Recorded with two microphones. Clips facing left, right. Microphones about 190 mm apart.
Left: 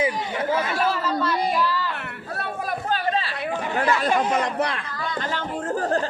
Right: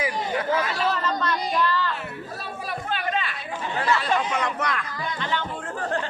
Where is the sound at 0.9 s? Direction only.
5° left (ahead or behind).